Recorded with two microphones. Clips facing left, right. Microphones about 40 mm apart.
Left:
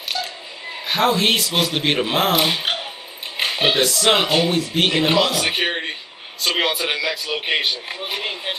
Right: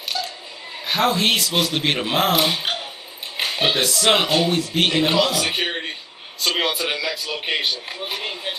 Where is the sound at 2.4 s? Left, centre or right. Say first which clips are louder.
Left 1 dB; centre.